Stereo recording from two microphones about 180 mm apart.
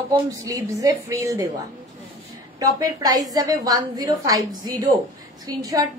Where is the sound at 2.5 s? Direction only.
20° right (ahead or behind).